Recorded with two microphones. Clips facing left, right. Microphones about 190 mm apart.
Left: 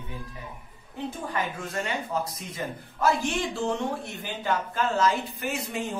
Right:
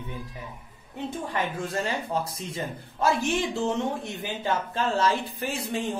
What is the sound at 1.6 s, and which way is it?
A man's voice, 30° right (ahead or behind).